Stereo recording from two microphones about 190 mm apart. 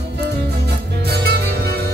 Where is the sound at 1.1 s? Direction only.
55° right (ahead or behind).